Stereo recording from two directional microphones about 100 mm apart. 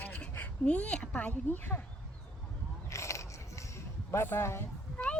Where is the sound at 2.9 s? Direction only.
30° left (ahead or behind).